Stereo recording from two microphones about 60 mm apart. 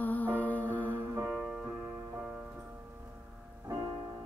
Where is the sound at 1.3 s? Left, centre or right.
Centre.